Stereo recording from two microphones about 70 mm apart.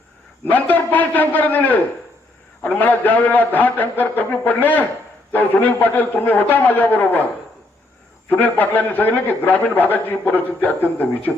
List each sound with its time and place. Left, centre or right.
0.5 s a man's voice: left
8.3 s a man's voice: left